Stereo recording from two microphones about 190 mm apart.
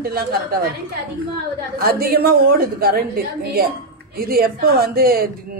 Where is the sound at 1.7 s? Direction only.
50° right (ahead or behind).